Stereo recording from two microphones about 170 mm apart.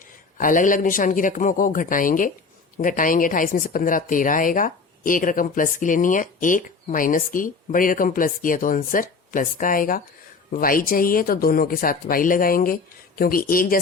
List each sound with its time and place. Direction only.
0.3 s speech: 50° left (ahead or behind)